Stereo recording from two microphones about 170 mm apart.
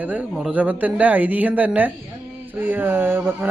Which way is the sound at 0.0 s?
10° right (ahead or behind).